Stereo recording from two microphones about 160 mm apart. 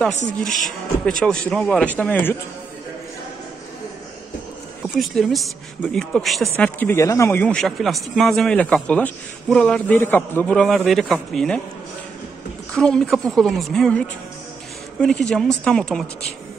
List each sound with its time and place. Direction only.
0.1 s speech: 50° left (ahead or behind)
1.0 s speech: 5° left (ahead or behind)
4.9 s speech: centre (ahead or behind)
6.5 s speech: 15° left (ahead or behind)
12.7 s speech: 5° left (ahead or behind)